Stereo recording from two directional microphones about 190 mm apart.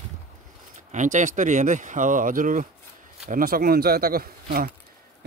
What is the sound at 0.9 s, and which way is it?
Speech, 40° right (ahead or behind).